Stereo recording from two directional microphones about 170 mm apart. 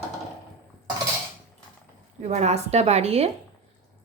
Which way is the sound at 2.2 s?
40° right (ahead or behind).